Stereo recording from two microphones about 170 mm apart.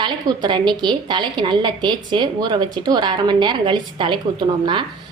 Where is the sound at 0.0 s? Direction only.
25° right (ahead or behind).